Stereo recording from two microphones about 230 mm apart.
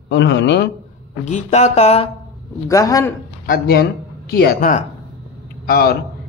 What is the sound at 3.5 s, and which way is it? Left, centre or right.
A man's voice, left.